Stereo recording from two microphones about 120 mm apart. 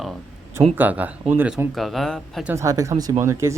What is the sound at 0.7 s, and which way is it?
Speech, 15° right (ahead or behind).